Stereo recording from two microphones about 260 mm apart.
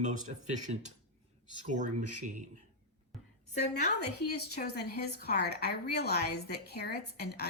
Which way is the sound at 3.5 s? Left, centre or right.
Left.